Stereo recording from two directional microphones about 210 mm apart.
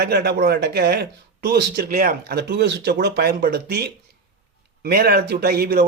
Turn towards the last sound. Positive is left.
turn(degrees=-45)  # may be behind; listen again after turning